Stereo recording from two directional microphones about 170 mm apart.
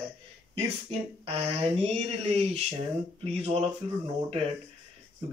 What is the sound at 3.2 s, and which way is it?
Speech, 35° right (ahead or behind).